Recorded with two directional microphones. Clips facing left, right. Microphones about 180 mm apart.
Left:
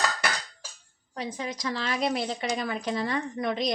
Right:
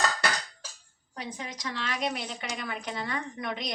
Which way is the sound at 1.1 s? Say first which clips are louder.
Left 5 dB; 35° left (ahead or behind).